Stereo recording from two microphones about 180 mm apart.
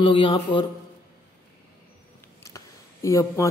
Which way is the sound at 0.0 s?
30° left (ahead or behind).